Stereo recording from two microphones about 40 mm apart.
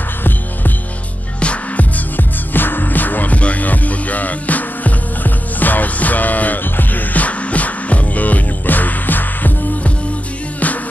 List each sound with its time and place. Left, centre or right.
1.4 s music: left